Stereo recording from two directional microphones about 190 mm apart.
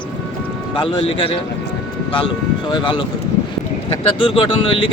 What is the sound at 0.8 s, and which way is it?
Speech, 30° left (ahead or behind).